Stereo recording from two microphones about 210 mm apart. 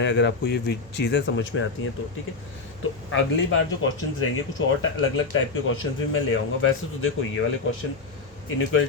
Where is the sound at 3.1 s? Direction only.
70° left (ahead or behind).